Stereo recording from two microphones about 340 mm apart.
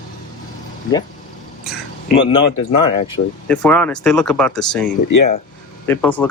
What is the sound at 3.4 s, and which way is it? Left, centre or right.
Speech, centre.